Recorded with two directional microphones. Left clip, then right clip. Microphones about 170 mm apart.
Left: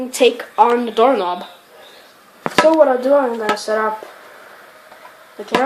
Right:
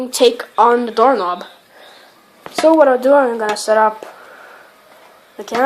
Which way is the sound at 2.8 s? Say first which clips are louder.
Right 2 dB; 50° right (ahead or behind).